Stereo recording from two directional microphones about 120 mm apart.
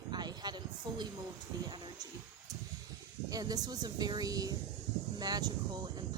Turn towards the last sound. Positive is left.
turn(degrees=-35)  # may be behind; listen again after turning